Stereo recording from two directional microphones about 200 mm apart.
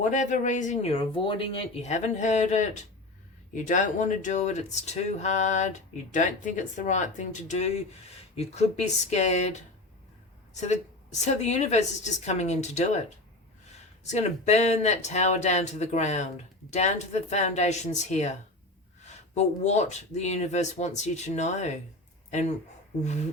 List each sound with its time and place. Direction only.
0.0 s speech: 40° left (ahead or behind)